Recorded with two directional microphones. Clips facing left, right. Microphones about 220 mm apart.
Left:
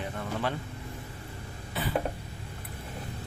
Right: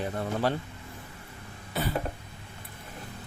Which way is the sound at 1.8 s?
40° right (ahead or behind).